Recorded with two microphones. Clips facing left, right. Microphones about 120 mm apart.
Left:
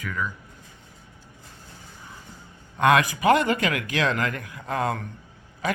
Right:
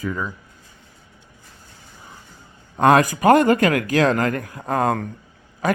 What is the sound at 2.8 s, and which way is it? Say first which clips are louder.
Speech: right 5 dB; 40° right (ahead or behind).